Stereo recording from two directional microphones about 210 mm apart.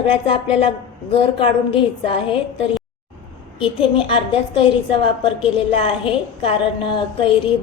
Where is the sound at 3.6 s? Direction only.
25° left (ahead or behind).